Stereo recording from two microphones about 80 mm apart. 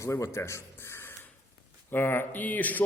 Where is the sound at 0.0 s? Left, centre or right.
Left.